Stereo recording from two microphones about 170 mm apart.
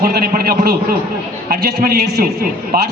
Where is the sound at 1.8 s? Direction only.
70° right (ahead or behind).